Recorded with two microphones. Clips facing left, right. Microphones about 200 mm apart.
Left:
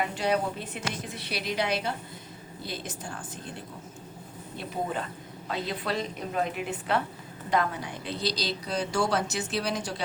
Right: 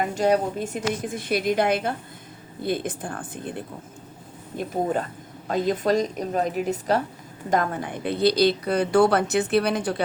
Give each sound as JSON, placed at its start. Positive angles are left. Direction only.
{"t": 0.0, "sound": "a woman's voice", "side_deg": -45}
{"t": 4.5, "sound": "a woman's voice", "side_deg": -45}